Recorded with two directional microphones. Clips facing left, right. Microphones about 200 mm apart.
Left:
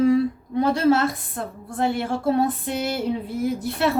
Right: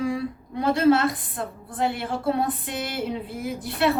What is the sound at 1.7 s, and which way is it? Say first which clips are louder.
Female singing: left 3 dB; 40° left (ahead or behind).